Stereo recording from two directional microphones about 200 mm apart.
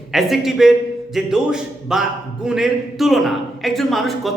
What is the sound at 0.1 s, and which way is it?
A man's voice, centre (ahead or behind).